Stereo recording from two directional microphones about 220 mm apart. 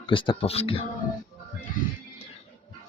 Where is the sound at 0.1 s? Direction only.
25° left (ahead or behind).